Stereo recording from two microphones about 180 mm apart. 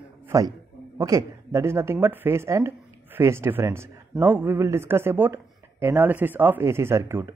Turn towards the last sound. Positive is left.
turn(degrees=-15)  # may be behind; listen again after turning